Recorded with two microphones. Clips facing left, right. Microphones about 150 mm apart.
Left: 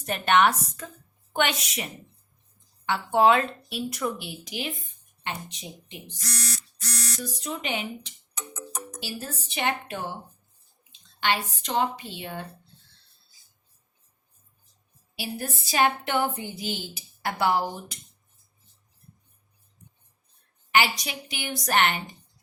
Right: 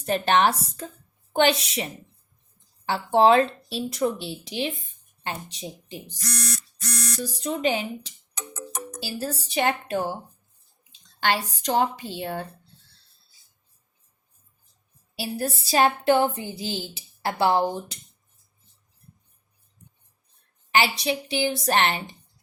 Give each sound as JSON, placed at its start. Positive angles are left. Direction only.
{"t": 0.0, "sound": "speech", "side_deg": -30}
{"t": 7.2, "sound": "speech", "side_deg": -30}
{"t": 8.4, "sound": "music", "side_deg": -70}
{"t": 9.0, "sound": "speech", "side_deg": -35}
{"t": 11.2, "sound": "speech", "side_deg": -40}
{"t": 15.1, "sound": "a woman's voice", "side_deg": -35}
{"t": 20.7, "sound": "a woman's voice", "side_deg": -30}